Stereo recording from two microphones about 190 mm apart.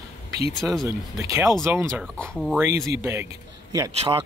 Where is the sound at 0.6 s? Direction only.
Centre (ahead or behind).